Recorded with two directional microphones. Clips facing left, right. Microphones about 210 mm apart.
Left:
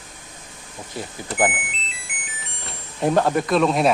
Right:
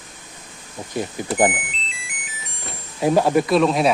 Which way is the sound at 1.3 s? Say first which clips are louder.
Right 3 dB; 40° right (ahead or behind).